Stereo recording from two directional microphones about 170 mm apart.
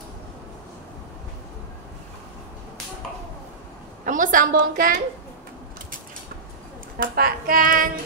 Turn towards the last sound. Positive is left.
turn(degrees=-55)  # may be behind; listen again after turning